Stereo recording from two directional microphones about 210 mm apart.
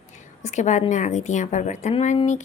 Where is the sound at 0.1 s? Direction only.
35° left (ahead or behind).